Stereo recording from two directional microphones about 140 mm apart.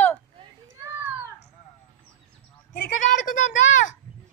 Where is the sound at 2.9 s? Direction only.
65° left (ahead or behind).